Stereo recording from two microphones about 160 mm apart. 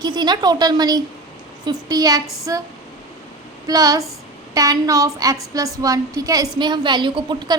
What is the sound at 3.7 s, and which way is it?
A woman's voice, 20° right (ahead or behind).